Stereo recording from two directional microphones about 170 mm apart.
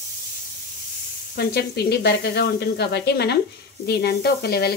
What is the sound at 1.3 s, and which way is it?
Speech, 70° left (ahead or behind).